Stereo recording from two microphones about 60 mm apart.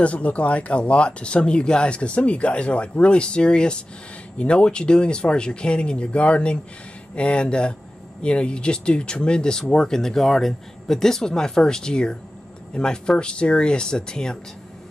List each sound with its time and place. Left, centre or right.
0.0 s speech: left